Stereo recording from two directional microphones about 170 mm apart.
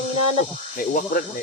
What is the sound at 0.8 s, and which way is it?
Speech, 55° left (ahead or behind).